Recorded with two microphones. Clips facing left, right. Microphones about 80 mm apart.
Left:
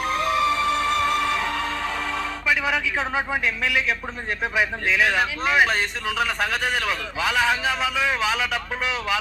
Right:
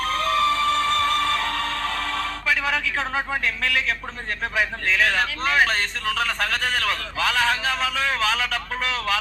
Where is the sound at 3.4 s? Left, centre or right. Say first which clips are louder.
Left 1 dB; centre.